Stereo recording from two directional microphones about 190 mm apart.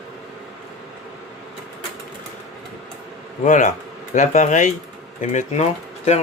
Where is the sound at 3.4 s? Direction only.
40° left (ahead or behind).